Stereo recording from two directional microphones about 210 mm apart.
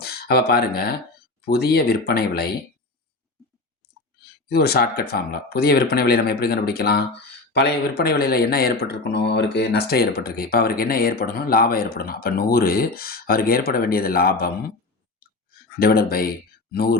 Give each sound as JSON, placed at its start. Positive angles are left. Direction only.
{"t": 0.0, "sound": "speech", "side_deg": 50}
{"t": 4.4, "sound": "speech", "side_deg": 50}
{"t": 15.8, "sound": "speech", "side_deg": 45}